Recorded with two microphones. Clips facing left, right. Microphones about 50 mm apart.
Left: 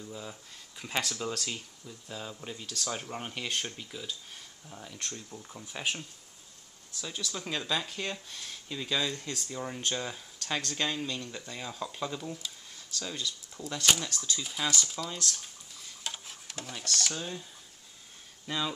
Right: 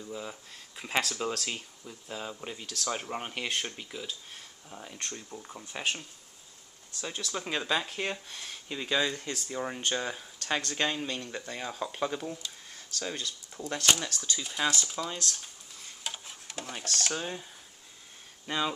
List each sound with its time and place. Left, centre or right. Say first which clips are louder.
0.0 s speech: right 3 dB; centre; by 13.3 s right
13.9 s speech: even; centre
14.6 s speech: right 3 dB; centre
16.0 s stir: even; centre
16.7 s speech: right 1 dB; right
18.5 s speech: right 2 dB; right